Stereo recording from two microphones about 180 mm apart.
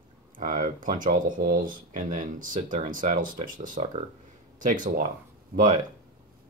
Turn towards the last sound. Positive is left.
turn(degrees=-50)  # may be behind; listen again after turning